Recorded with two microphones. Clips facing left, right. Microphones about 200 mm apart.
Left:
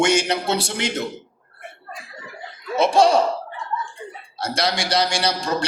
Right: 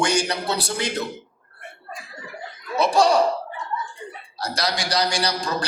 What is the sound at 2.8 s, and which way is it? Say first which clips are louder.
Speech: left 2 dB; 25° left (ahead or behind).